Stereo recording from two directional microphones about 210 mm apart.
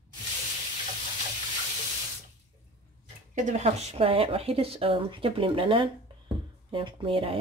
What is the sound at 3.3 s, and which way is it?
Speech, 35° right (ahead or behind).